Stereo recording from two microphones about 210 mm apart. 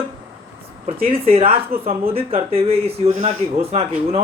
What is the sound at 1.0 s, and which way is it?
Speech, 25° right (ahead or behind).